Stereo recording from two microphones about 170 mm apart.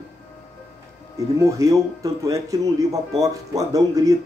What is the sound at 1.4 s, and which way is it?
Speech, 20° right (ahead or behind).